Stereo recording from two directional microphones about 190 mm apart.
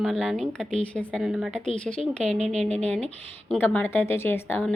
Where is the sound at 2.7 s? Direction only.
35° right (ahead or behind).